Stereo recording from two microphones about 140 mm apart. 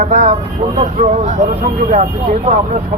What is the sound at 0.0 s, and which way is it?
Speech, 60° right (ahead or behind).